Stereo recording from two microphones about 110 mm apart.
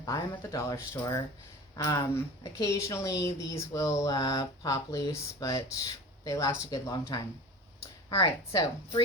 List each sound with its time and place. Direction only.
0.0 s speech: 35° left (ahead or behind)
8.1 s speech: 35° left (ahead or behind)